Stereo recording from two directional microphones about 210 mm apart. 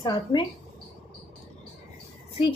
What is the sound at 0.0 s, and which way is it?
Speech, 20° left (ahead or behind).